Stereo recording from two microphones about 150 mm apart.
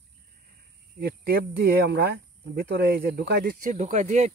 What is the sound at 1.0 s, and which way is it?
Speech, 90° right.